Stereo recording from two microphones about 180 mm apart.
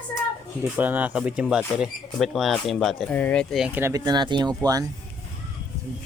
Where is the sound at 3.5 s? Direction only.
5° right (ahead or behind); by 4.8 s 20° right (ahead or behind).